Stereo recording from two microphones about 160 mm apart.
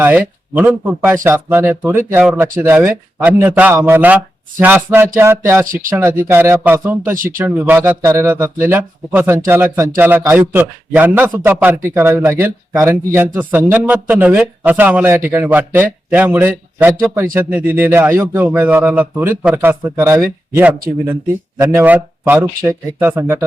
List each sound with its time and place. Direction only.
0.0 s speech: 10° right (ahead or behind)
5.6 s speech: 60° right (ahead or behind)
6.3 s speech: 15° right (ahead or behind)